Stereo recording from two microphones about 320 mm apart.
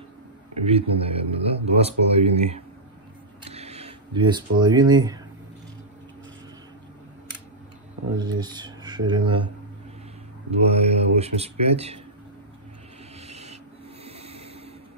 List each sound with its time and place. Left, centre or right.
0.7 s speech: centre
8.2 s speech: centre
10.7 s speech: centre
13.3 s rub: centre
14.0 s a sound: centre